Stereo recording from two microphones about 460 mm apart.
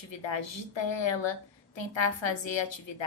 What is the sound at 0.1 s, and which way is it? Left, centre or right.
A woman's voice, left.